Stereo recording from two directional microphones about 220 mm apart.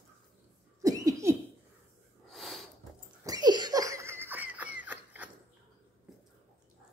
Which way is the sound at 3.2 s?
20° right (ahead or behind).